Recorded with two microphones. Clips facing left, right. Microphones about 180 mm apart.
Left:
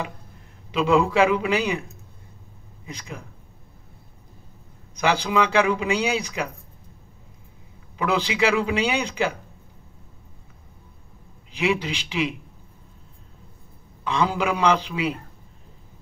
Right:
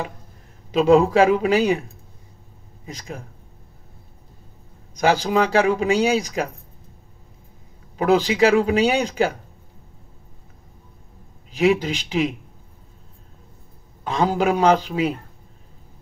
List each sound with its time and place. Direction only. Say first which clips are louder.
0.7 s speech: right 5 dB; 40° right (ahead or behind)
4.9 s speech: right 3 dB; 45° right (ahead or behind)
8.0 s speech: right 6 dB; 40° right (ahead or behind)
11.5 s speech: right 6 dB; 40° right (ahead or behind)
14.0 s speech: right 3 dB; 40° right (ahead or behind)